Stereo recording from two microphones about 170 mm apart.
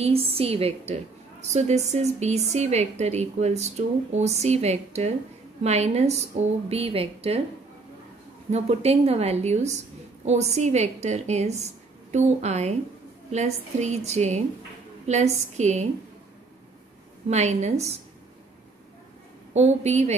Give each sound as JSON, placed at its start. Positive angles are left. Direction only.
{"t": 0.0, "sound": "a woman's voice", "side_deg": -35}
{"t": 8.5, "sound": "a woman's voice", "side_deg": -40}
{"t": 17.3, "sound": "a woman's voice", "side_deg": -40}
{"t": 19.5, "sound": "a woman's voice", "side_deg": -40}